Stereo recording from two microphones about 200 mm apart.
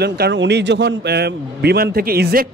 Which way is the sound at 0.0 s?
60° right (ahead or behind).